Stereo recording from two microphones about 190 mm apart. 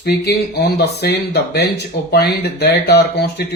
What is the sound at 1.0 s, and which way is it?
Speech, 60° left (ahead or behind).